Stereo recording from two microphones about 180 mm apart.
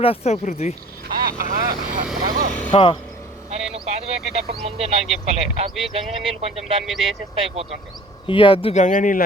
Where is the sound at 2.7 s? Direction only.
30° left (ahead or behind).